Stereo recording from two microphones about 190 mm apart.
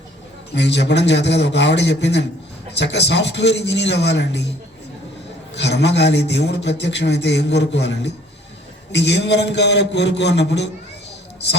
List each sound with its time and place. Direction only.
0.5 s a man's voice: 65° left (ahead or behind)
5.5 s a man's voice: 65° left (ahead or behind)